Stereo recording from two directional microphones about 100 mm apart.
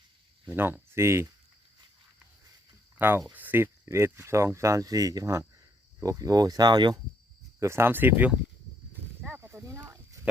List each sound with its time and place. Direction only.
0.5 s speech: 20° right (ahead or behind)
3.0 s speech: 20° right (ahead or behind); by 7.0 s 45° right (ahead or behind)
7.6 s speech: 25° right (ahead or behind)
9.3 s a sound: 20° right (ahead or behind)